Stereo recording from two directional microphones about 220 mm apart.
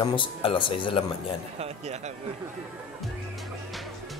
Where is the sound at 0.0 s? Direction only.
20° left (ahead or behind).